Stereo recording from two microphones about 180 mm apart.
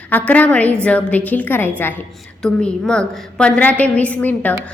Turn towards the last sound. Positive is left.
turn(degrees=10)  # may be behind; listen again after turning